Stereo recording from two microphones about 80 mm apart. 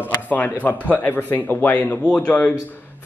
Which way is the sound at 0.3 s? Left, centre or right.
Left.